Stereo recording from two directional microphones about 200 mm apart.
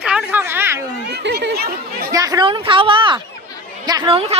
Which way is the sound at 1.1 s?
55° right (ahead or behind).